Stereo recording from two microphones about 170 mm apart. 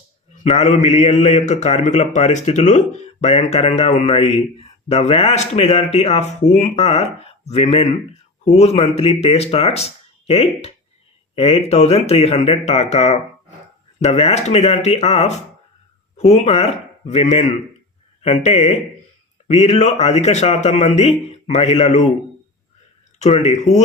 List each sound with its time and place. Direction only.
0.4 s a man's voice: 40° left (ahead or behind)
23.3 s speech: 40° left (ahead or behind)